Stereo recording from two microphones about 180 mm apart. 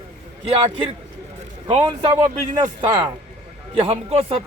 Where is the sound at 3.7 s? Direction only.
30° right (ahead or behind).